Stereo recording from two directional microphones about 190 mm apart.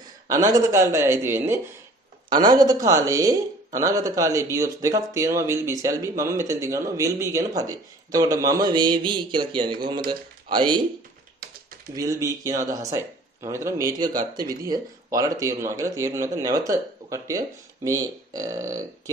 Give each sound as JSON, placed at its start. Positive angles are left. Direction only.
{"t": 0.3, "sound": "speech", "side_deg": -20}
{"t": 11.9, "sound": "speech", "side_deg": -15}